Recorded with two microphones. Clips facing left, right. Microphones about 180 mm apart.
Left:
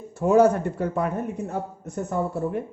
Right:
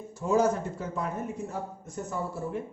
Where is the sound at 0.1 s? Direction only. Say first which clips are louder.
Left 7 dB; 60° left (ahead or behind).